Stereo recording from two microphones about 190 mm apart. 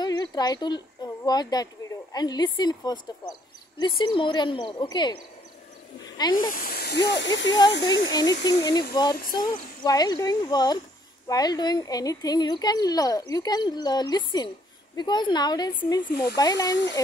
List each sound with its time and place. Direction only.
0.0 s speech: 20° left (ahead or behind)
6.5 s speech: 50° left (ahead or behind)
7.1 s speech: 70° left (ahead or behind)
8.1 s speech: 20° left (ahead or behind)
16.0 s speech: 55° left (ahead or behind)
16.3 s speech: 20° left (ahead or behind)